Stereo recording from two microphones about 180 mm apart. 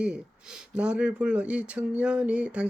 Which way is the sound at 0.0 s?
5° right (ahead or behind).